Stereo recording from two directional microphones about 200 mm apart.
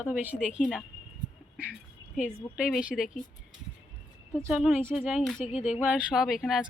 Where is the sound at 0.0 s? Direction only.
5° right (ahead or behind).